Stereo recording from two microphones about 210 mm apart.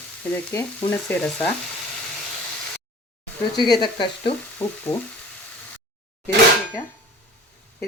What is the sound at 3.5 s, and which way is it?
Speech, 20° left (ahead or behind).